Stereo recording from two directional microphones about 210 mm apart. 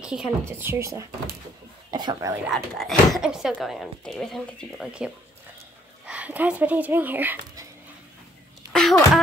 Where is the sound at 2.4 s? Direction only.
Centre (ahead or behind).